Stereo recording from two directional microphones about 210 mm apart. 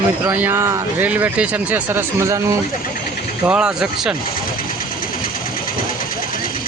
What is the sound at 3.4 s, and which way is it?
Speech, 5° right (ahead or behind).